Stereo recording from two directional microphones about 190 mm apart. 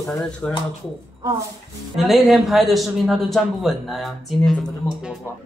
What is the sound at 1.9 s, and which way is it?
A man's voice, centre (ahead or behind).